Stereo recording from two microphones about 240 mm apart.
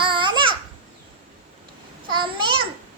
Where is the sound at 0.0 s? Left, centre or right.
Right.